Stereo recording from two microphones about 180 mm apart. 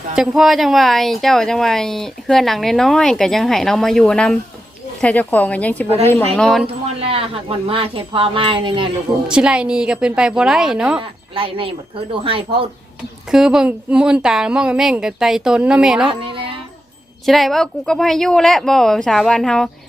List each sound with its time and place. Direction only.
0.2 s speech: centre (ahead or behind)
7.0 s speech: 30° right (ahead or behind)
9.2 s speech: 5° right (ahead or behind)
11.3 s speech: 30° right (ahead or behind)
13.3 s speech: 5° right (ahead or behind)
16.2 s a sound: 30° right (ahead or behind)
17.2 s speech: centre (ahead or behind)